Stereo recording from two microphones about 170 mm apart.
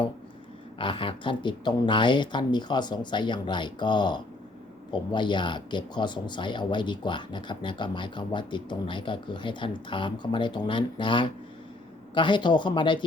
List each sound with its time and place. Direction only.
0.8 s speech: 30° left (ahead or behind)